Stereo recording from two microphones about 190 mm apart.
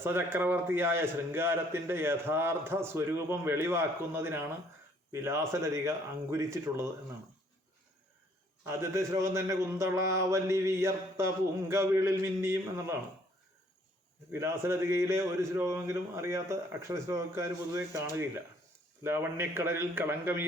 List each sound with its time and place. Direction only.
0.0 s a man's voice: 15° right (ahead or behind)
8.6 s a man's voice: 15° right (ahead or behind)
14.3 s a man's voice: 15° right (ahead or behind)